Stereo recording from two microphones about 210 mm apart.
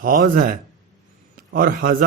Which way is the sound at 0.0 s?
40° right (ahead or behind).